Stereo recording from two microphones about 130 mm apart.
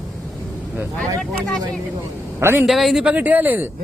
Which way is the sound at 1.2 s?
5° left (ahead or behind).